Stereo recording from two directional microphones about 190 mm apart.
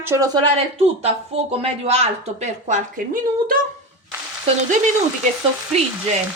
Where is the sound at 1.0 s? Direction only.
35° right (ahead or behind).